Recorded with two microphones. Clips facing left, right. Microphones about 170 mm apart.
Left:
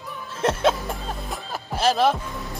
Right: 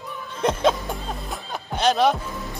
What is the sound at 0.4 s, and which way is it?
Speech, 5° left (ahead or behind).